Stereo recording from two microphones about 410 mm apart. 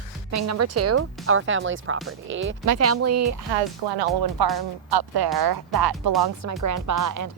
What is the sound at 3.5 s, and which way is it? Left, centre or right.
Speech, right.